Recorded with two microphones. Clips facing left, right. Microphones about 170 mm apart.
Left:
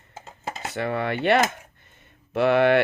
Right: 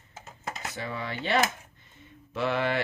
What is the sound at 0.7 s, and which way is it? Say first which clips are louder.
Speech: left 12 dB; 65° left (ahead or behind).